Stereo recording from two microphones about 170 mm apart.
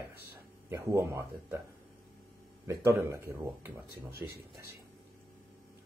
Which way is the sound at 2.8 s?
15° right (ahead or behind).